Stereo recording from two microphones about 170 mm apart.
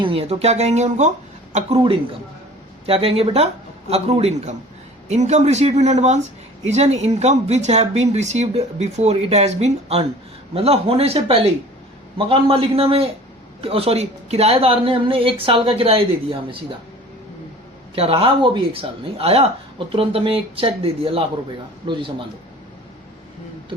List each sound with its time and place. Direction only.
0.0 s speech: 35° right (ahead or behind)
1.5 s speech: 35° right (ahead or behind)
17.9 s a man's voice: 35° right (ahead or behind)